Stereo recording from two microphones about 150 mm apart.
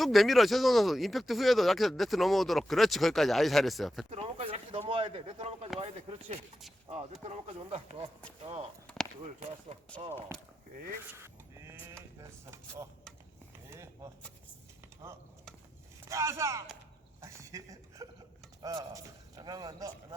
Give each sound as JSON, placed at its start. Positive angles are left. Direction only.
{"t": 0.0, "sound": "speech", "side_deg": 0}
{"t": 4.1, "sound": "speech", "side_deg": -40}
{"t": 13.7, "sound": "a sound", "side_deg": -20}
{"t": 16.0, "sound": "a man's voice", "side_deg": -20}
{"t": 17.2, "sound": "a sound", "side_deg": -20}
{"t": 18.6, "sound": "a man's voice", "side_deg": -25}